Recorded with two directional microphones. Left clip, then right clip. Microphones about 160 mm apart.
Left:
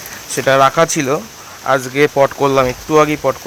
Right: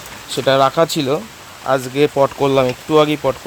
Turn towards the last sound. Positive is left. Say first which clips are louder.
# left 2 dB
turn(degrees=-10)  # may be behind; listen again after turning